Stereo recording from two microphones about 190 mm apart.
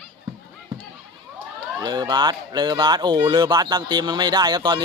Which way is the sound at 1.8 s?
20° right (ahead or behind).